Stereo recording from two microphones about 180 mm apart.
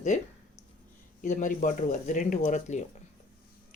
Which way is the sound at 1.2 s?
45° left (ahead or behind).